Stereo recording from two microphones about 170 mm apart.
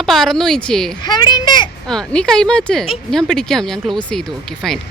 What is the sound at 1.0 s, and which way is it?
Speech, 25° left (ahead or behind).